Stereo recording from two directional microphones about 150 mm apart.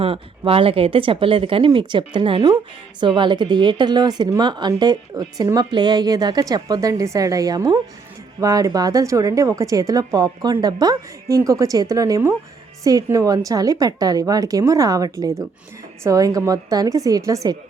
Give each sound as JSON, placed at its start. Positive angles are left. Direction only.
{"t": 0.0, "sound": "a woman's voice", "side_deg": -40}